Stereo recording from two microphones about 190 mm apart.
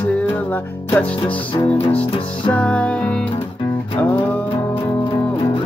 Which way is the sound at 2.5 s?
5° left (ahead or behind).